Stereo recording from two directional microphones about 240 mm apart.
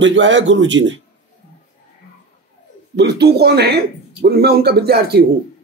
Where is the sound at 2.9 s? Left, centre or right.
Right.